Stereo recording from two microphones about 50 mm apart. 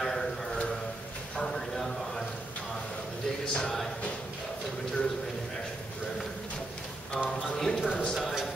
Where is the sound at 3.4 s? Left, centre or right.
Centre.